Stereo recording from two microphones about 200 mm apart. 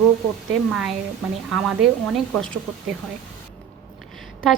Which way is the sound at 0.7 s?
Centre (ahead or behind).